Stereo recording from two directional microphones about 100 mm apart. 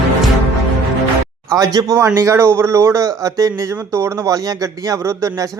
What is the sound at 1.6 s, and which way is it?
Speech, 40° right (ahead or behind).